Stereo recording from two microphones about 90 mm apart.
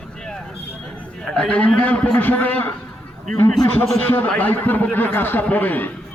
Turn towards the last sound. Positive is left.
turn(degrees=20)  # may be behind; listen again after turning